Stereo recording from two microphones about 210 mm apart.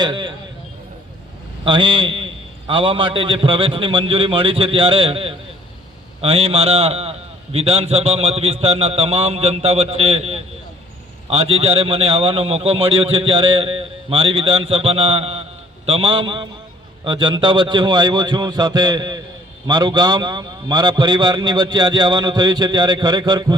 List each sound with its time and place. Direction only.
0.0 s a man's voice: 20° right (ahead or behind)
1.6 s a man's voice: 25° right (ahead or behind)